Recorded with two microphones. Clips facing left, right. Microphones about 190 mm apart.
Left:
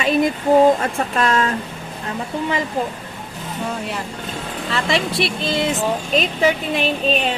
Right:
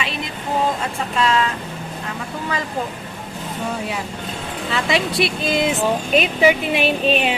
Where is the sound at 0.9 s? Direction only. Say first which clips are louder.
Left 1 dB; 50° left (ahead or behind).